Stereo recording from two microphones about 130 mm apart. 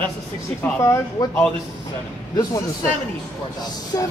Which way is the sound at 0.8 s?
20° left (ahead or behind).